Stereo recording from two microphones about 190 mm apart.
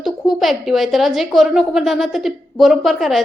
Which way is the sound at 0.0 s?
Centre (ahead or behind).